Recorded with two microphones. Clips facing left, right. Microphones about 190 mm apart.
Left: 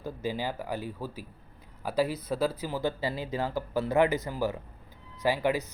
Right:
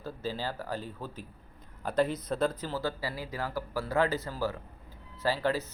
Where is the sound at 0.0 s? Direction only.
15° left (ahead or behind).